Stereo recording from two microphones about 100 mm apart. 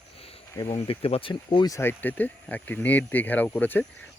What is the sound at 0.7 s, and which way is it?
Speech, 70° left (ahead or behind).